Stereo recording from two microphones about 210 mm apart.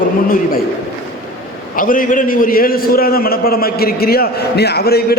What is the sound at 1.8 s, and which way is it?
A man's voice, 40° left (ahead or behind).